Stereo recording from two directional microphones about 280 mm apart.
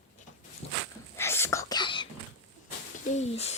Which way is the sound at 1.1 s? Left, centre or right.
Centre.